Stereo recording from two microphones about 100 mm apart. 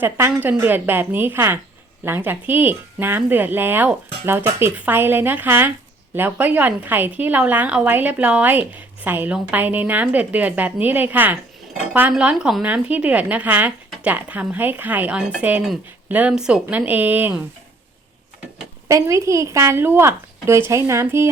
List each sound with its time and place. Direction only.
0.0 s a woman's voice: 20° right (ahead or behind)
18.9 s speech: 30° right (ahead or behind)